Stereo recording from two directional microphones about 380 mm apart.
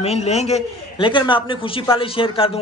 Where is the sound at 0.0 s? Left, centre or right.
Centre.